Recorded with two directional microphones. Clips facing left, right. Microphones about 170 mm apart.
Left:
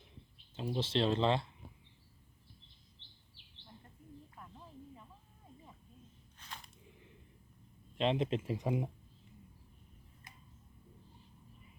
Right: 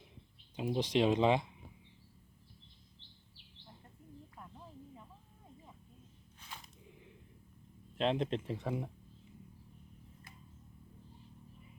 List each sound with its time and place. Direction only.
0.5 s speech: 15° right (ahead or behind)
6.4 s a sound: 5° right (ahead or behind)
7.9 s speech: centre (ahead or behind)